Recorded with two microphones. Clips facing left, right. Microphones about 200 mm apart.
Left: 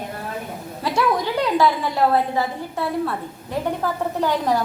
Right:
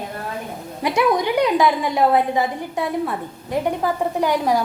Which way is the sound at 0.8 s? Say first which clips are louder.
Right 3 dB; 15° right (ahead or behind).